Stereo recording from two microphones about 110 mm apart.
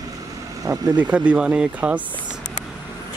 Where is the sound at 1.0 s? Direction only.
10° right (ahead or behind).